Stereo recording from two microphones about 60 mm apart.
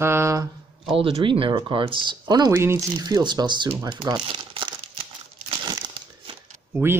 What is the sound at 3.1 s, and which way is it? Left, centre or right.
Speech, right.